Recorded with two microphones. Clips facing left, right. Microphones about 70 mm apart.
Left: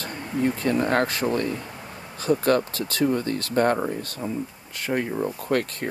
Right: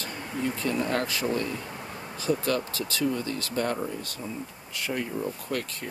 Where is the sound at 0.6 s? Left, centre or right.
Left.